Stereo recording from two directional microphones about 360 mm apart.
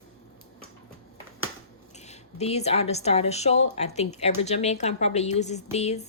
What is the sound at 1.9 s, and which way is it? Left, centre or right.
Speech, centre.